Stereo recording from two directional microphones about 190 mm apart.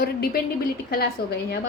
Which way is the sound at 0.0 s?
55° left (ahead or behind).